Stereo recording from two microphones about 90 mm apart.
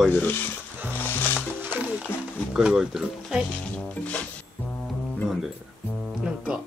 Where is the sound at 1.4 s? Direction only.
15° right (ahead or behind).